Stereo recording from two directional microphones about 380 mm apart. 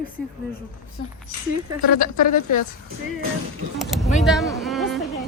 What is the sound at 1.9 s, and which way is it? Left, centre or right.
Speech, left.